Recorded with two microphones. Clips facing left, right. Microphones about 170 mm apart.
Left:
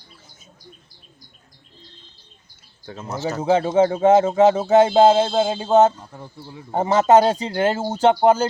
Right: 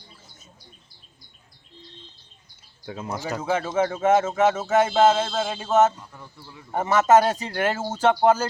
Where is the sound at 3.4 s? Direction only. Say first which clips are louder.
Left 7 dB; 30° left (ahead or behind).